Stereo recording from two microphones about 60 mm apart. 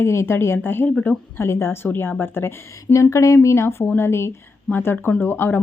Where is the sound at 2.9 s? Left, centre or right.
Left.